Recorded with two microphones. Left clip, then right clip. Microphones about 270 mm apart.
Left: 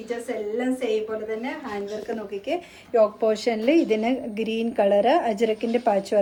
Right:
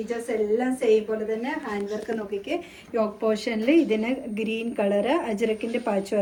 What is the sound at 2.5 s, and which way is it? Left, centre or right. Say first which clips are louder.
A woman's voice: left 4 dB; left.